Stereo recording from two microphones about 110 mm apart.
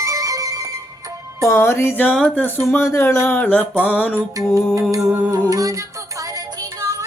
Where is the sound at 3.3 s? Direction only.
15° left (ahead or behind).